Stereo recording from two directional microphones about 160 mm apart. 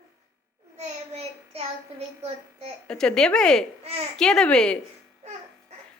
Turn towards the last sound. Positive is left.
turn(degrees=5)  # may be behind; listen again after turning